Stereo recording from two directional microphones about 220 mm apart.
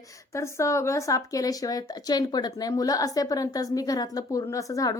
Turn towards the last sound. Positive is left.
turn(degrees=15)  # may be behind; listen again after turning